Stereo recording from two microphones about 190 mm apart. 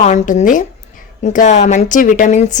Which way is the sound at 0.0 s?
40° left (ahead or behind).